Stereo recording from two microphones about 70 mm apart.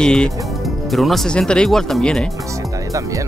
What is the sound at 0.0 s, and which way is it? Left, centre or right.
Speech, centre.